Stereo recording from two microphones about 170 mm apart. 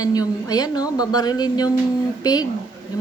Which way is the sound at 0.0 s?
20° left (ahead or behind).